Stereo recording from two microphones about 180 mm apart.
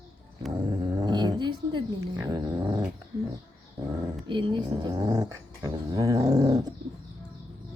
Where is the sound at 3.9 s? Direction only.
25° right (ahead or behind).